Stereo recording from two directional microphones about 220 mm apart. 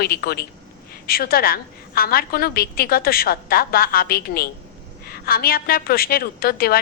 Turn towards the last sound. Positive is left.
turn(degrees=45)  # may be behind; listen again after turning